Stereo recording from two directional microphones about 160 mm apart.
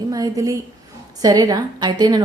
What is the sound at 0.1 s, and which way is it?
A woman's voice, 20° right (ahead or behind).